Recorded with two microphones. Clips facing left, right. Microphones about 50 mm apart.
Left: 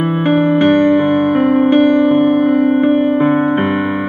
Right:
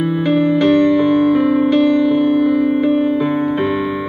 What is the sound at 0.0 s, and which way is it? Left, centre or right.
Music, left.